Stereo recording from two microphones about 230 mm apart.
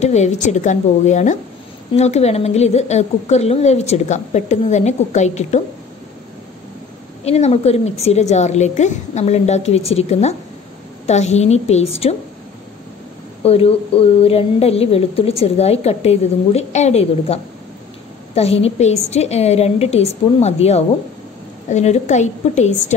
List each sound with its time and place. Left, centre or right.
0.0 s a woman's voice: left
7.2 s speech: left
13.4 s a woman's voice: left